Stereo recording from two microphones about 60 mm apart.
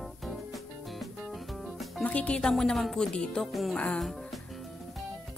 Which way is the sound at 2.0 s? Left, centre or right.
Left.